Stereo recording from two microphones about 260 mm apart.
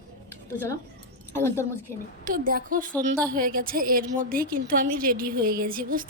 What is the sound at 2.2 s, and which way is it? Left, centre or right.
A woman's voice, right.